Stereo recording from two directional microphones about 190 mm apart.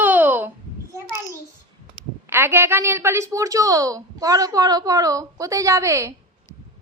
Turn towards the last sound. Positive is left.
turn(degrees=-15)  # may be behind; listen again after turning